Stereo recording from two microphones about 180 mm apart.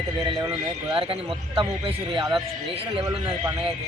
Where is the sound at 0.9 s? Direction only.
30° right (ahead or behind).